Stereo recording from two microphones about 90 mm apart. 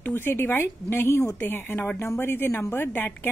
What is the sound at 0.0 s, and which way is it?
A woman's voice, 25° left (ahead or behind).